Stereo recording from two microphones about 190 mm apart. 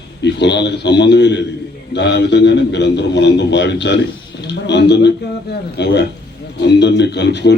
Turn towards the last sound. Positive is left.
turn(degrees=65)  # may be behind; listen again after turning